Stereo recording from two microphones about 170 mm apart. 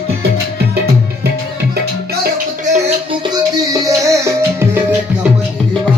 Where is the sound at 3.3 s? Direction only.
20° right (ahead or behind).